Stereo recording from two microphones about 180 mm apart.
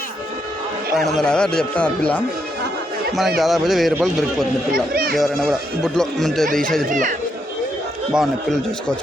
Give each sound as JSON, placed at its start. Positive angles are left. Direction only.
{"t": 0.9, "sound": "a man's voice", "side_deg": 0}
{"t": 4.7, "sound": "speech", "side_deg": -55}
{"t": 5.1, "sound": "a man's voice", "side_deg": 0}
{"t": 6.8, "sound": "speech", "side_deg": -45}
{"t": 8.1, "sound": "a man's voice", "side_deg": 0}